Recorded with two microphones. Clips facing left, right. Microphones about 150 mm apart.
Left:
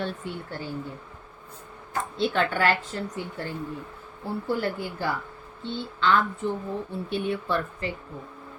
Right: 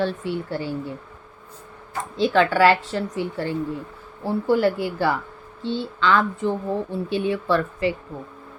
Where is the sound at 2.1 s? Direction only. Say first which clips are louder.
Right 7 dB; 90° right.